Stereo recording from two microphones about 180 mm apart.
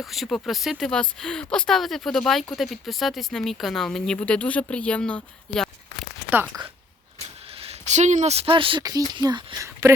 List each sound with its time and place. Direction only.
0.0 s speech: centre (ahead or behind)
6.5 s speech: 20° right (ahead or behind)
7.5 s speech: 35° right (ahead or behind)